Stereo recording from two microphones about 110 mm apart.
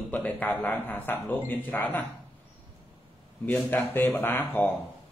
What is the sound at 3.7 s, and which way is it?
Speech, 20° left (ahead or behind).